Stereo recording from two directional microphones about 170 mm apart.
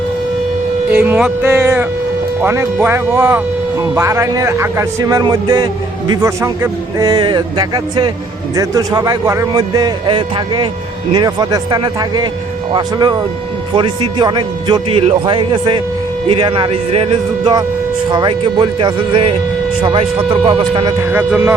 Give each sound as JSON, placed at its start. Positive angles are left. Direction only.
{"t": 0.9, "sound": "a man's voice", "side_deg": -10}
{"t": 21.0, "sound": "a man's voice", "side_deg": -10}